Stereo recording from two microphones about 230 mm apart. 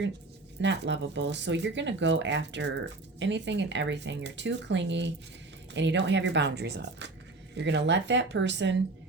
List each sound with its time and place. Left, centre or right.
0.6 s speech: right